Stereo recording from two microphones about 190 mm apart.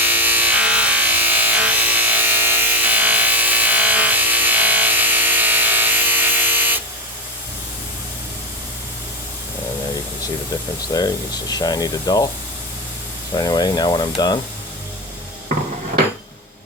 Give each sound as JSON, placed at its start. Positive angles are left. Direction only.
{"t": 0.0, "sound": "a sound", "side_deg": -10}
{"t": 10.9, "sound": "speech", "side_deg": 20}
{"t": 13.3, "sound": "speech", "side_deg": 20}